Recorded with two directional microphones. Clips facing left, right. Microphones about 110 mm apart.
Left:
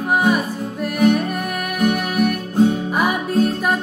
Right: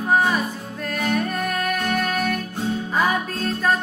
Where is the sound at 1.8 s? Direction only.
10° left (ahead or behind).